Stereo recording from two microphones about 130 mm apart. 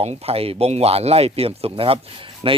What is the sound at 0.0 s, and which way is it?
Speech, 50° right (ahead or behind).